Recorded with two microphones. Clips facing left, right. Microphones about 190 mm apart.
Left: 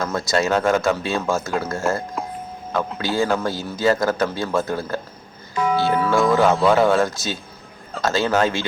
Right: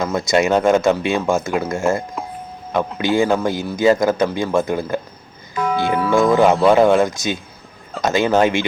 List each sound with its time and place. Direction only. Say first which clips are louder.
0.0 s speech: right 4 dB; 15° right (ahead or behind)
2.2 s a sound: even; centre (ahead or behind)
3.0 s speech: right 5 dB; 15° right (ahead or behind)
5.5 s music: even; centre (ahead or behind)
5.8 s music: right 3 dB; 15° right (ahead or behind)
6.7 s speech: right 4 dB; 15° right (ahead or behind)